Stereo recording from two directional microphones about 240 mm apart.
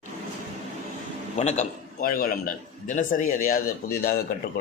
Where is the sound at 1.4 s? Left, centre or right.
Left.